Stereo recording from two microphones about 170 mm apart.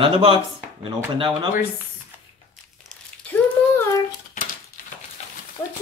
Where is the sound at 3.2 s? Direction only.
10° left (ahead or behind).